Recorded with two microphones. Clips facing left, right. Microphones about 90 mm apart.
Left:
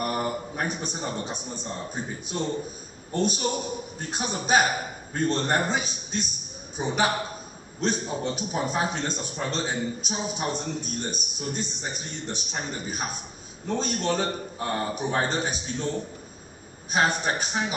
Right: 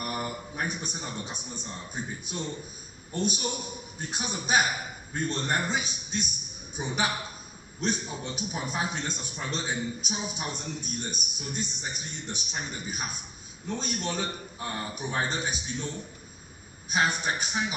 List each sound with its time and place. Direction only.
0.0 s a man's voice: 35° left (ahead or behind)